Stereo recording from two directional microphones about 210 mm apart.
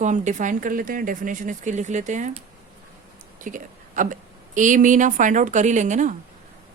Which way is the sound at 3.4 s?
40° right (ahead or behind).